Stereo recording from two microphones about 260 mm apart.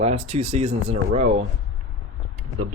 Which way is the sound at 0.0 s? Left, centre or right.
Right.